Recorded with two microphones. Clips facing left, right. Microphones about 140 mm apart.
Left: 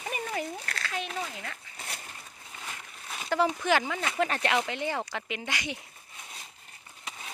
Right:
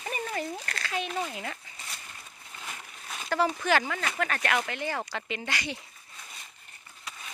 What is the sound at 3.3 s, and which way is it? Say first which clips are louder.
Speech: even; 15° left (ahead or behind).